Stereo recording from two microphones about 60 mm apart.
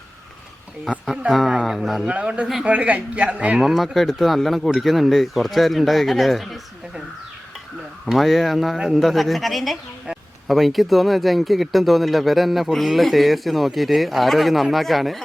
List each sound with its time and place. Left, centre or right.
1.3 s speech: centre
2.0 s speech: right
3.6 s speech: centre
8.0 s speech: centre